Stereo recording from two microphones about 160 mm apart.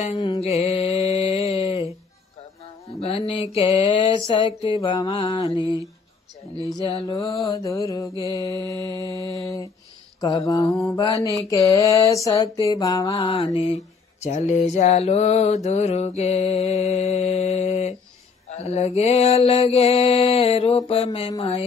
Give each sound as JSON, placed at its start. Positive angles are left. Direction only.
{"t": 0.4, "sound": "mantra", "side_deg": 40}
{"t": 7.2, "sound": "mantra", "side_deg": 25}
{"t": 13.2, "sound": "mantra", "side_deg": 35}